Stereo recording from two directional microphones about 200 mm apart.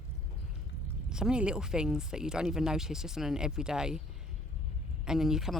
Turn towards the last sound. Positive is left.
turn(degrees=0)  # may be behind; listen again after turning